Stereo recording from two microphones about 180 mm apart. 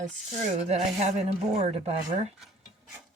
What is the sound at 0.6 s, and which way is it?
A woman's voice, 40° right (ahead or behind).